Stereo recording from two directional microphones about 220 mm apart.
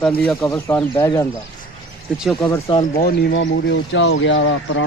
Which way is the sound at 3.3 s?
55° left (ahead or behind).